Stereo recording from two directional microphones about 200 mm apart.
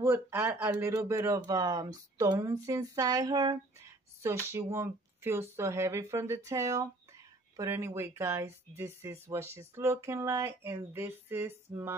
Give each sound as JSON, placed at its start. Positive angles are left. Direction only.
{"t": 0.0, "sound": "speech", "side_deg": -10}